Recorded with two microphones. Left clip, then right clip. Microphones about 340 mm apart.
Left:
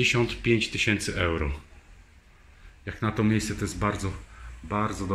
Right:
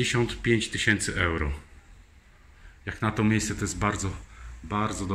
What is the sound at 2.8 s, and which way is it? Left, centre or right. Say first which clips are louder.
Speech: right 1 dB; centre.